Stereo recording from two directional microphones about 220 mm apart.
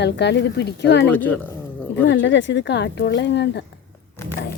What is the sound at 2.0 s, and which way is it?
Speech, 55° left (ahead or behind).